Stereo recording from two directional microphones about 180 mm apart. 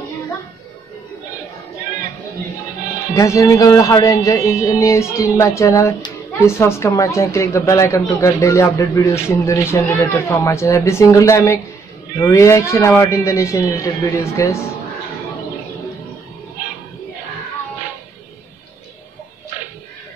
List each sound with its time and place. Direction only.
3.2 s speech: 15° left (ahead or behind)